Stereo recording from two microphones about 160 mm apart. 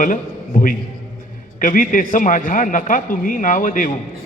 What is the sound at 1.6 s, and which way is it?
A man's voice, 60° left (ahead or behind).